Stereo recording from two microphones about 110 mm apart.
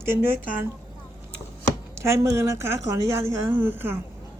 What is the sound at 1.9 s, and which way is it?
A woman's voice, 25° right (ahead or behind).